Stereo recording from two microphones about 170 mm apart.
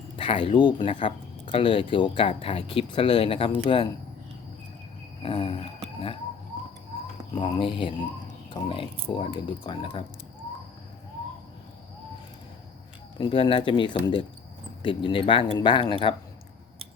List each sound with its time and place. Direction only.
0.2 s speech: 35° left (ahead or behind)
5.2 s speech: 35° left (ahead or behind)
7.3 s speech: 30° left (ahead or behind)
13.1 s speech: 30° left (ahead or behind)